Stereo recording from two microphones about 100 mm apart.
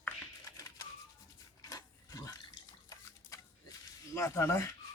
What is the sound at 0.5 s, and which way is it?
Music, 35° left (ahead or behind).